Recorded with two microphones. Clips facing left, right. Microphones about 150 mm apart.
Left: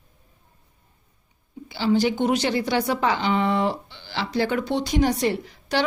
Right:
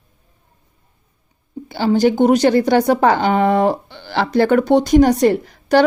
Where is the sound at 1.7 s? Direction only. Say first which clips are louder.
Right 6 dB; 45° right (ahead or behind).